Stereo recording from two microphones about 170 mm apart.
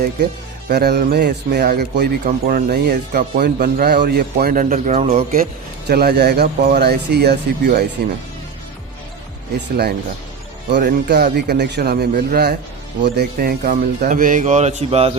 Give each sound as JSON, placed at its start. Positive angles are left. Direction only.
{"t": 0.7, "sound": "speech", "side_deg": -70}
{"t": 5.9, "sound": "speech", "side_deg": -70}
{"t": 10.7, "sound": "speech", "side_deg": -80}